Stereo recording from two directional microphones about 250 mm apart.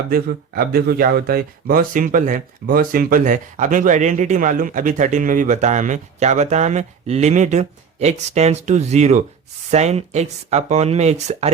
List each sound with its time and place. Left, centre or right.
0.1 s speech: right